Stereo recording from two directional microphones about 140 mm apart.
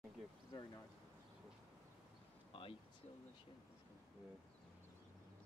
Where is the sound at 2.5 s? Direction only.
40° left (ahead or behind).